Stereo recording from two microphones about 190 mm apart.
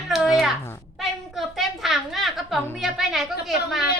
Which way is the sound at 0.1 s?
Centre (ahead or behind).